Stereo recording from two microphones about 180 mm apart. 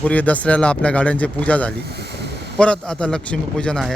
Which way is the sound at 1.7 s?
65° right (ahead or behind).